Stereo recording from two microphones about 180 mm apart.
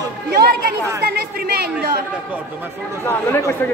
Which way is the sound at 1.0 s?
60° right (ahead or behind).